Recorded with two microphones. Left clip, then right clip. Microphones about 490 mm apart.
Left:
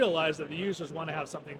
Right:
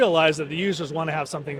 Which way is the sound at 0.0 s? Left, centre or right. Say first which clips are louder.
Right 8 dB; right.